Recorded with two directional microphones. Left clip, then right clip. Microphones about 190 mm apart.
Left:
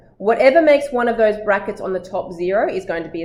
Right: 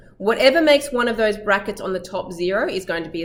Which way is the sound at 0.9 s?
15° right (ahead or behind).